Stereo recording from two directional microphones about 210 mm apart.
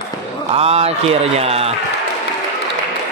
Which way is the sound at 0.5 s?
30° right (ahead or behind).